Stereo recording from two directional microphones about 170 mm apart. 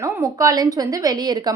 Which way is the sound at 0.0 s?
20° right (ahead or behind).